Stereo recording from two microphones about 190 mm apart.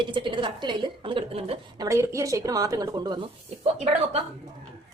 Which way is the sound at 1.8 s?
15° right (ahead or behind).